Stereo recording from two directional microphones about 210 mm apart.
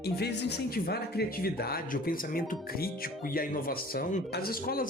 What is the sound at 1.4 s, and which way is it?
Speech, 45° left (ahead or behind).